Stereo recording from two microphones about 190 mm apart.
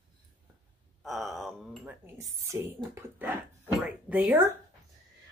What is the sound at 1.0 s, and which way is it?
Speech, centre (ahead or behind).